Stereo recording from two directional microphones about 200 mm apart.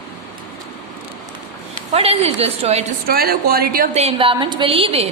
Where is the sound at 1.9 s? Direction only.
30° right (ahead or behind).